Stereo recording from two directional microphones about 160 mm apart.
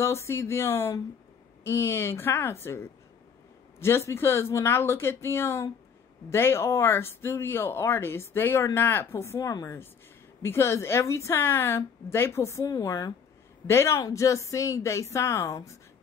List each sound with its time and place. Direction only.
0.0 s speech: 15° left (ahead or behind)